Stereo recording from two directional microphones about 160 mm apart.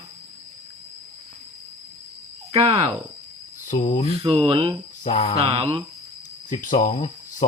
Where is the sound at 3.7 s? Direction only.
55° left (ahead or behind).